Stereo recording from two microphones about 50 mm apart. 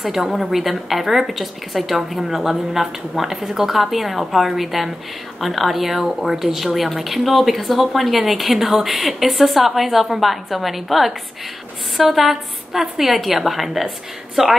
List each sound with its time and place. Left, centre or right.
0.0 s speech: centre